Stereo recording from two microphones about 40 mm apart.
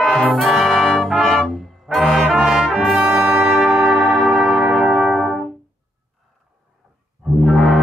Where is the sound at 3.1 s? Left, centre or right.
Right.